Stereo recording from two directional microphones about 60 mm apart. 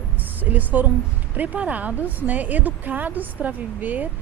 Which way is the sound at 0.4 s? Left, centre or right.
Right.